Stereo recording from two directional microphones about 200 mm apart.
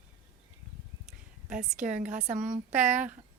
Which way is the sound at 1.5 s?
40° right (ahead or behind).